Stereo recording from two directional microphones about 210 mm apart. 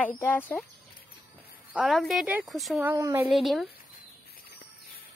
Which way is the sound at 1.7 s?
Centre (ahead or behind).